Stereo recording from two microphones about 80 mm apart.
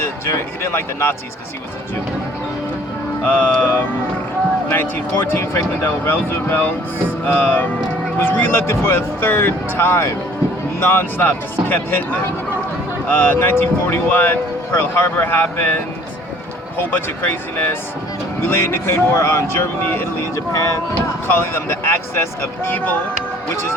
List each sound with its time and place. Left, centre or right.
0.3 s speech: left
3.2 s speech: left
21.7 s speech: left